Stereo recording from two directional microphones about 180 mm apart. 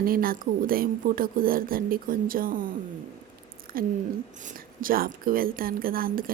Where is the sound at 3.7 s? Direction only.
55° right (ahead or behind).